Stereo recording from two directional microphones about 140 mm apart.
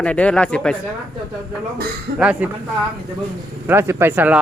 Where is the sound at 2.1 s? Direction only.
10° right (ahead or behind).